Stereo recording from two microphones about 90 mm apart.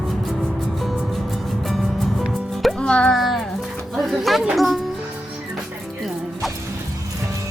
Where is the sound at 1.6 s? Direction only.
Centre (ahead or behind).